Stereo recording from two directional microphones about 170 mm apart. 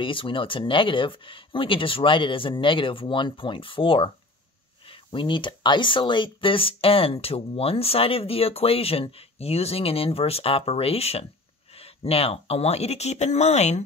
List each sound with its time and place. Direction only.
0.0 s speech: 30° left (ahead or behind)